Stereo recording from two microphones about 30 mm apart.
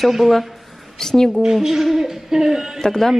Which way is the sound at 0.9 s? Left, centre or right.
Centre.